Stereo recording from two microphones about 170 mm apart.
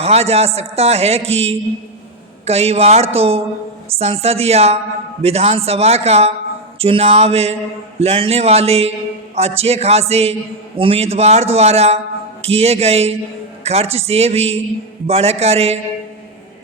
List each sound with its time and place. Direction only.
0.0 s a man's voice: 40° right (ahead or behind)